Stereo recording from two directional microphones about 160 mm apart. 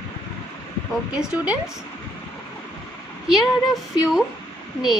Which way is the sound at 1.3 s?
10° right (ahead or behind).